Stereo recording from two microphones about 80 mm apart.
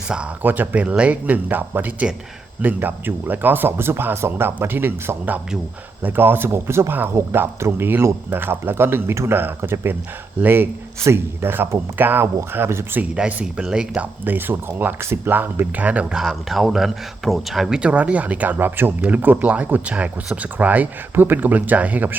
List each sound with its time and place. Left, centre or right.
0.4 s speech: right
13.0 s speech: centre
14.3 s speech: right
16.1 s speech: centre